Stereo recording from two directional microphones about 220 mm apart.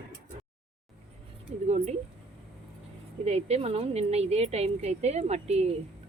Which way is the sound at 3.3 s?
30° right (ahead or behind).